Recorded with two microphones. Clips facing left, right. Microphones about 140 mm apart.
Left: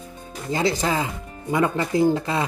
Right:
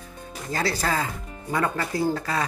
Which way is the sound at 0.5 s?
20° left (ahead or behind).